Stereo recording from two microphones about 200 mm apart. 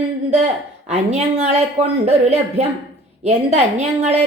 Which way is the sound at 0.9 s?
35° right (ahead or behind).